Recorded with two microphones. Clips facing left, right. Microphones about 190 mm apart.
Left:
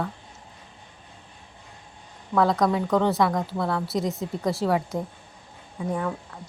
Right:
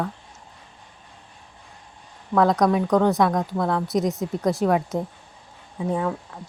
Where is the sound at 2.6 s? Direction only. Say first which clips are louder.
Right 3 dB; 15° right (ahead or behind).